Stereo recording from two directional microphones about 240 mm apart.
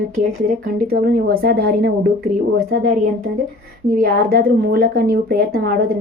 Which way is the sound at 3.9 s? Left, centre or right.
Right.